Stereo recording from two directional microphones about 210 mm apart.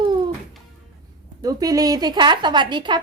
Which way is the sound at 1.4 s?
15° right (ahead or behind).